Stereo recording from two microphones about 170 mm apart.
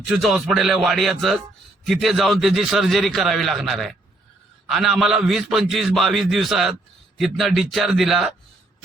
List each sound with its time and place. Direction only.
0.2 s a man's voice: centre (ahead or behind)